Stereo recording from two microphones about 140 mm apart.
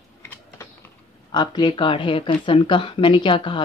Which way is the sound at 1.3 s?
30° left (ahead or behind).